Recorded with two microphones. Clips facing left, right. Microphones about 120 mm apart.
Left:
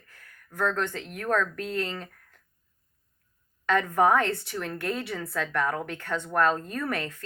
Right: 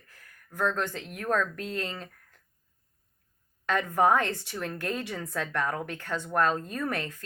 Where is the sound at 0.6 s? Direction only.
25° right (ahead or behind).